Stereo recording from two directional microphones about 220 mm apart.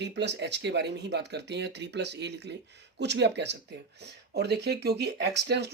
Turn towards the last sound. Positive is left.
turn(degrees=-50)  # may be behind; listen again after turning